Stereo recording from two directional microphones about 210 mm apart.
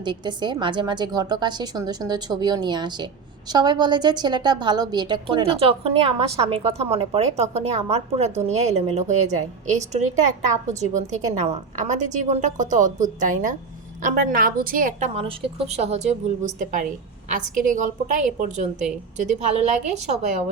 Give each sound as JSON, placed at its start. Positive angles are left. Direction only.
{"t": 0.0, "sound": "a woman's voice", "side_deg": -20}